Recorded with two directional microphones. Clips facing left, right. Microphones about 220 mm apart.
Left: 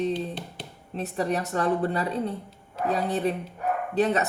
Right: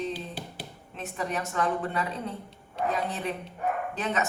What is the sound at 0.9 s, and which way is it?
Speech, 35° left (ahead or behind).